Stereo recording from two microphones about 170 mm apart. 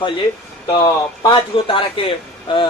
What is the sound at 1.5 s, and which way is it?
Speech, 30° left (ahead or behind).